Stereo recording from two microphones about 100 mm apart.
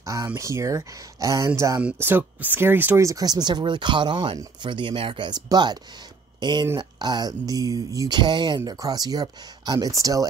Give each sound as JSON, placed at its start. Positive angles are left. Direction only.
{"t": 0.0, "sound": "speech", "side_deg": -35}
{"t": 2.0, "sound": "speech", "side_deg": -20}
{"t": 3.1, "sound": "speech", "side_deg": -40}
{"t": 8.2, "sound": "speech", "side_deg": -50}